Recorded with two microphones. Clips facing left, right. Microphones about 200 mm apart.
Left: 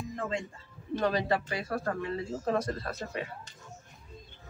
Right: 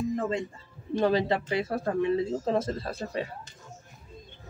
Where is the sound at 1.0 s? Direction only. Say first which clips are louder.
Right 4 dB; 25° right (ahead or behind).